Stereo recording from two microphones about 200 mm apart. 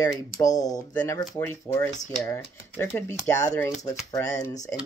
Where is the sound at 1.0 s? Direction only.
15° left (ahead or behind).